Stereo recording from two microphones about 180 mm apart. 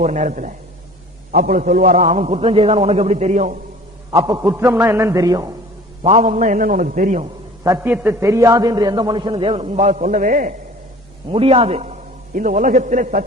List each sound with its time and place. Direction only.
0.0 s a man's voice: 40° right (ahead or behind)
4.1 s a man's voice: 20° right (ahead or behind)
6.0 s a man's voice: 35° right (ahead or behind)
7.6 s a man's voice: 15° right (ahead or behind); by 10.5 s 50° right (ahead or behind)
11.3 s a man's voice: 35° right (ahead or behind)